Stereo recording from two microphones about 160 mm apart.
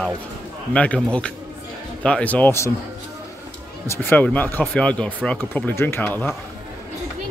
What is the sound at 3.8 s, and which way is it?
Speech, 15° left (ahead or behind).